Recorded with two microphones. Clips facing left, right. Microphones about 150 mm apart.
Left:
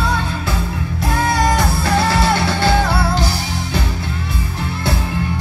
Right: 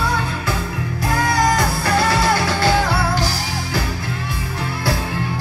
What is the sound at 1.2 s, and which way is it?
Music, 25° left (ahead or behind).